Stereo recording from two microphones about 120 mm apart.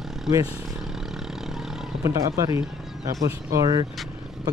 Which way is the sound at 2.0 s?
25° right (ahead or behind).